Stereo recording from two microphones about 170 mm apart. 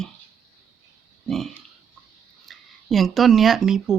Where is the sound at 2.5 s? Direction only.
Centre (ahead or behind).